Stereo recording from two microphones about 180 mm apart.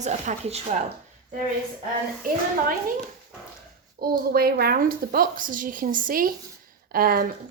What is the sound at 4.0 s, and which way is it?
A woman's voice, 55° right (ahead or behind).